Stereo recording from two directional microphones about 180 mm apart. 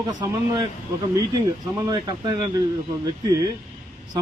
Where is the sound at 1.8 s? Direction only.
20° right (ahead or behind).